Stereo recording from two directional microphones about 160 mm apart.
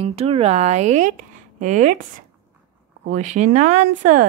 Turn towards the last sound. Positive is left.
turn(degrees=-50)  # may be behind; listen again after turning